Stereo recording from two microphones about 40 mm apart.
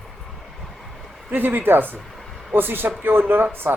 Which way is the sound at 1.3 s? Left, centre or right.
Right.